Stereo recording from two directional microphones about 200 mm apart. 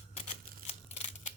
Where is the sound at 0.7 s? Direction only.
30° left (ahead or behind).